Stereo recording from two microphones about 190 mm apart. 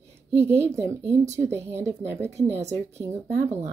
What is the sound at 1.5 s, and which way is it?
Speech, 15° right (ahead or behind).